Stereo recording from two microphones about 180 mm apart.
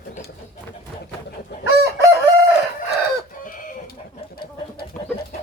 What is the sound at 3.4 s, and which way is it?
Chicken, 50° left (ahead or behind).